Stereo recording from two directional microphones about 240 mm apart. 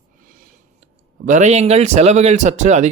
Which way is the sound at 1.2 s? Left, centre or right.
Right.